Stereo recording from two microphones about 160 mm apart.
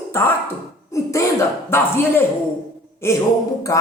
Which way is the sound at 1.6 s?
15° left (ahead or behind).